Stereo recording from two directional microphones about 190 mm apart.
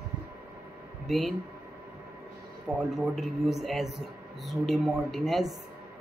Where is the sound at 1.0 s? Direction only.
Centre (ahead or behind).